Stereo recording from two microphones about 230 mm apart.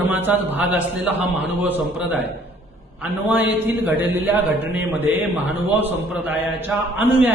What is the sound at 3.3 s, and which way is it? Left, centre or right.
A man's voice, centre.